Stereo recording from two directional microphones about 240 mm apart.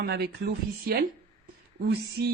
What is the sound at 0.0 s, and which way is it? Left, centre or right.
Speech, right.